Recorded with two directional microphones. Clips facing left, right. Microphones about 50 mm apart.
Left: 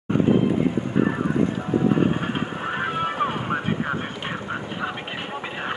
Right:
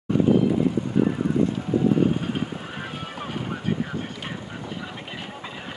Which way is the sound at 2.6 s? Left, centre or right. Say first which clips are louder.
Left 9 dB; left.